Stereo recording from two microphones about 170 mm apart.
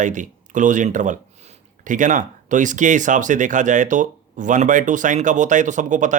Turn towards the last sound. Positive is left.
turn(degrees=-50)  # may be behind; listen again after turning